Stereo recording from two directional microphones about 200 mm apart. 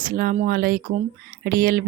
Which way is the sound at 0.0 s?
45° right (ahead or behind).